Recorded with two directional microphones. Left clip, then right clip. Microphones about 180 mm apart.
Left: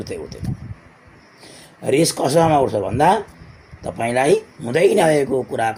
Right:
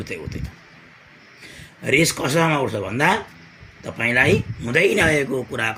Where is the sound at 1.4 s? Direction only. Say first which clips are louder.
Left 3 dB; 20° right (ahead or behind).